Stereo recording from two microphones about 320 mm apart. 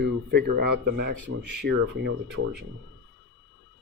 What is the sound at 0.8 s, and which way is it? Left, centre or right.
Speech, right.